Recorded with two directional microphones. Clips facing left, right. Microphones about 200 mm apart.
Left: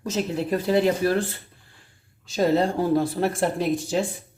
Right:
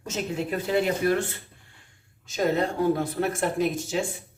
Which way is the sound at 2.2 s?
30° left (ahead or behind).